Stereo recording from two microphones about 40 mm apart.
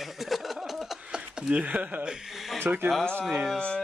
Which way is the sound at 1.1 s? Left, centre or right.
Centre.